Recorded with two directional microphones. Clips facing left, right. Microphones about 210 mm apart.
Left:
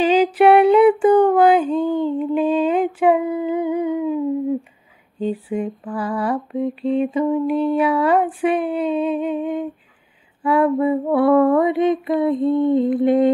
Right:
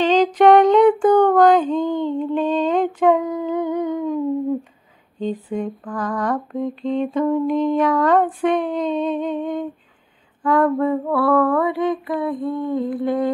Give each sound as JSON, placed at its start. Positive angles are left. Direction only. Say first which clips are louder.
{"t": 0.0, "sound": "a sound", "louder": "even", "side_deg": 10}
{"t": 5.2, "sound": "lullaby", "louder": "left 1 dB", "side_deg": 5}
{"t": 10.4, "sound": "female singing", "louder": "left 1 dB", "side_deg": 10}